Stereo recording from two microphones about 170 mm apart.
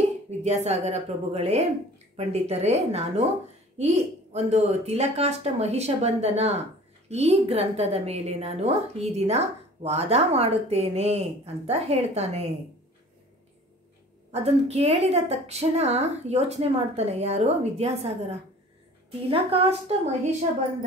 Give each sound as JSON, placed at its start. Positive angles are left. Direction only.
{"t": 0.4, "sound": "a woman's voice", "side_deg": -40}
{"t": 14.3, "sound": "a woman's voice", "side_deg": -35}
{"t": 19.2, "sound": "a woman's voice", "side_deg": -35}